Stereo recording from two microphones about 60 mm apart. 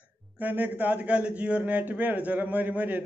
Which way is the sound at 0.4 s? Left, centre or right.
Right.